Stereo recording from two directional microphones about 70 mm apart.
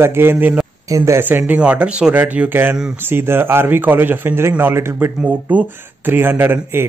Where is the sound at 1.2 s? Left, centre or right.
Right.